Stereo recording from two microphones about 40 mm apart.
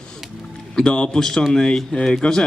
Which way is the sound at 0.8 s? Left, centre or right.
Left.